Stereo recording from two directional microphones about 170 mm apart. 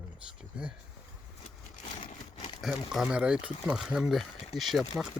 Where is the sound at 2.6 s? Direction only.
Centre (ahead or behind).